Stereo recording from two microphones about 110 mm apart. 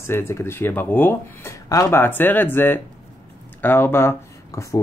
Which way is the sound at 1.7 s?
30° left (ahead or behind).